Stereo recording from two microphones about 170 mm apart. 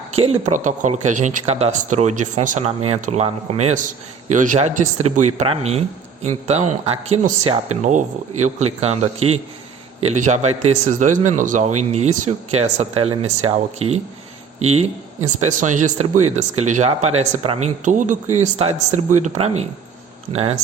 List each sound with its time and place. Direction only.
0.2 s speech: 40° right (ahead or behind)